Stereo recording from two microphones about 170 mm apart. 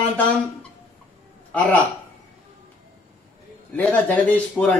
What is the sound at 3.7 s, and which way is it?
A man's voice, 10° left (ahead or behind).